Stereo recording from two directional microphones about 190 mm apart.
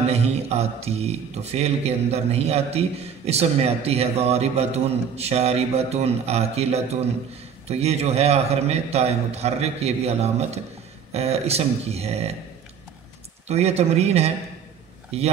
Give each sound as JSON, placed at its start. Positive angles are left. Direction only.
{"t": 0.1, "sound": "a man's voice", "side_deg": -35}
{"t": 13.5, "sound": "a man's voice", "side_deg": -35}